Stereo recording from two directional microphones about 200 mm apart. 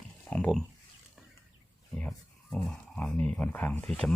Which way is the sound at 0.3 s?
5° left (ahead or behind).